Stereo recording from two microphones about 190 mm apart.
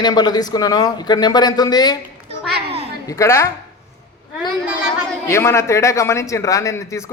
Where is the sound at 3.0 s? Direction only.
20° left (ahead or behind).